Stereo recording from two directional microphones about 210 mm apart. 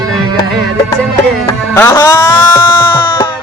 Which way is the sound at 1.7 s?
10° left (ahead or behind).